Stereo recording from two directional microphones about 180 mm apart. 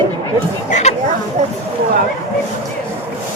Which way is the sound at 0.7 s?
40° left (ahead or behind).